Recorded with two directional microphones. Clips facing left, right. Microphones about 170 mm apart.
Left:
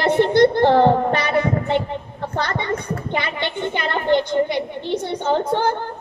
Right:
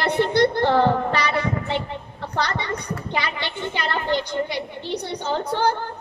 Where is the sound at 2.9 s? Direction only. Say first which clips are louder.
Left 3 dB; 50° left (ahead or behind).